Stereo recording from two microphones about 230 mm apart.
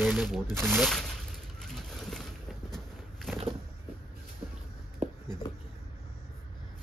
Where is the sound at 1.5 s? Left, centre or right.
Centre.